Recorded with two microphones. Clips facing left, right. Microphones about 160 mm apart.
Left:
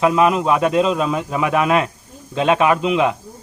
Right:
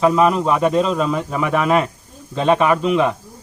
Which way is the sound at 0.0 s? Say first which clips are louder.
Even; 5° left (ahead or behind).